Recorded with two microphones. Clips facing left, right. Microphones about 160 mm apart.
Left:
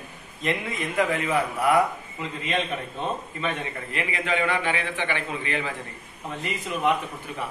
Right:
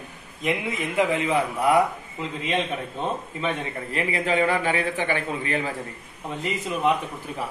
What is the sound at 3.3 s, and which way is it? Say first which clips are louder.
A man's voice: right 2 dB; 30° right (ahead or behind).